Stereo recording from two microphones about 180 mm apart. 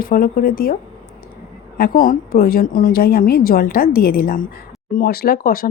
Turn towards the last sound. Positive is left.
turn(degrees=55)  # may be behind; listen again after turning